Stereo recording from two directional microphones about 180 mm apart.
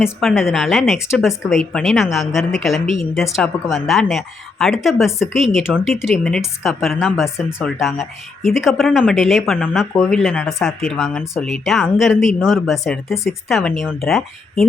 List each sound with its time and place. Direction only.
0.0 s speech: centre (ahead or behind)